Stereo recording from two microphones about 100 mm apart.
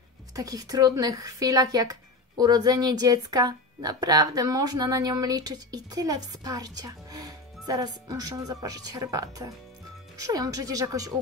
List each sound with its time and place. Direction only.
0.4 s speech: 40° right (ahead or behind)